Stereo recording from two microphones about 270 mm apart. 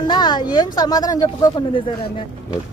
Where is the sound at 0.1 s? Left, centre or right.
Centre.